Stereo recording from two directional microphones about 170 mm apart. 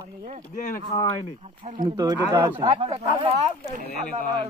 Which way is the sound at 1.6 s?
35° right (ahead or behind).